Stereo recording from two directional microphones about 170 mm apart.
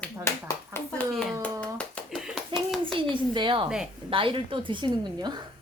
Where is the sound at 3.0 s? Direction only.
30° right (ahead or behind).